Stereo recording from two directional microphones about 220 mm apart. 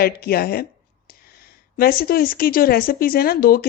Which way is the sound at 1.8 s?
45° left (ahead or behind).